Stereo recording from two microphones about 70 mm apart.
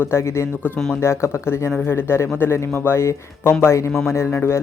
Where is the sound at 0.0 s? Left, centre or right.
Left.